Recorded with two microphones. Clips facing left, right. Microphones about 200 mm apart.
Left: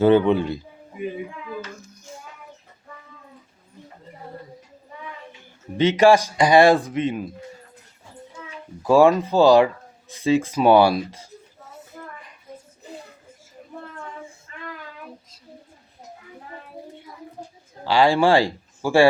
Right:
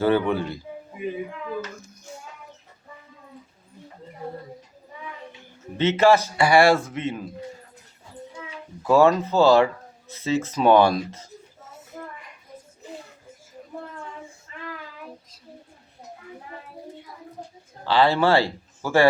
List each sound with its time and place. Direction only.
0.0 s a man's voice: 20° left (ahead or behind)
5.7 s speech: 15° left (ahead or behind)
8.8 s speech: 15° left (ahead or behind)
17.8 s speech: 15° left (ahead or behind)